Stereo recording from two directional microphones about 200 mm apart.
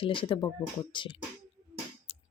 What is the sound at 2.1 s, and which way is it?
Music, 30° left (ahead or behind).